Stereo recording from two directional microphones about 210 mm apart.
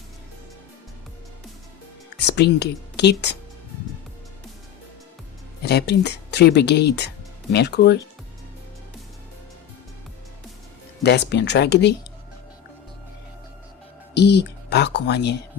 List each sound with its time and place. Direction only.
2.2 s speech: 50° left (ahead or behind)
5.6 s speech: 50° left (ahead or behind)
11.0 s speech: 55° left (ahead or behind)
14.1 s speech: 55° left (ahead or behind)